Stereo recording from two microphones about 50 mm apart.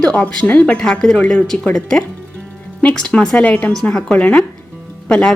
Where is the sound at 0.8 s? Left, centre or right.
Centre.